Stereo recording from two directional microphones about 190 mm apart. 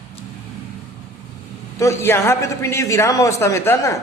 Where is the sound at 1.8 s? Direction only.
15° left (ahead or behind).